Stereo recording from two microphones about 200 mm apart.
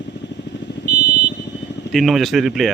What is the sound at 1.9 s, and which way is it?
Speech, centre (ahead or behind).